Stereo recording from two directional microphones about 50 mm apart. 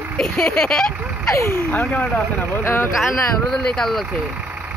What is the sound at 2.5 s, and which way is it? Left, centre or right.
Speech, left.